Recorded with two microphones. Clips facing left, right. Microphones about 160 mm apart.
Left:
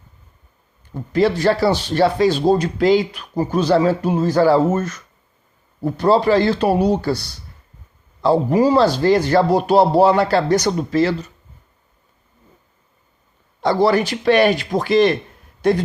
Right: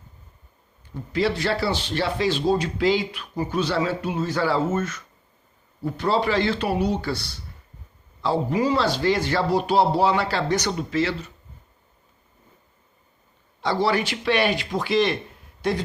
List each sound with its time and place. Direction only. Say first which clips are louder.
0.9 s speech: left 7 dB; 45° left (ahead or behind)
13.6 s speech: left 7 dB; 45° left (ahead or behind)